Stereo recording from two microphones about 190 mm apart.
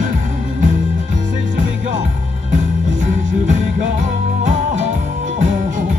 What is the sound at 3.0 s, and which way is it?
Music, 40° right (ahead or behind).